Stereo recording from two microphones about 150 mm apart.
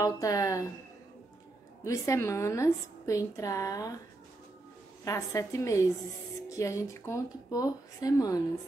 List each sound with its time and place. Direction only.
0.0 s a woman's voice: 25° left (ahead or behind)
1.9 s a woman's voice: 20° left (ahead or behind)
5.0 s a woman's voice: 20° left (ahead or behind)